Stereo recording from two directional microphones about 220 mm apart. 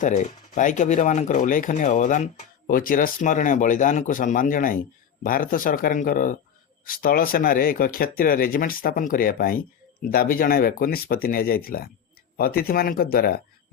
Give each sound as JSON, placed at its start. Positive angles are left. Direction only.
{"t": 0.0, "sound": "speech", "side_deg": 35}